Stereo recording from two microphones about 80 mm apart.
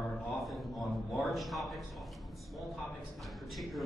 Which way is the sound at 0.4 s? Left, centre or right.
Centre.